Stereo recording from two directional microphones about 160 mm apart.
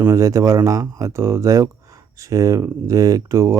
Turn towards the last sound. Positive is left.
turn(degrees=-20)  # may be behind; listen again after turning